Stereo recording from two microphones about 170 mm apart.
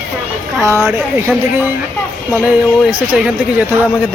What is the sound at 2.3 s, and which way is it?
Speech, 10° right (ahead or behind).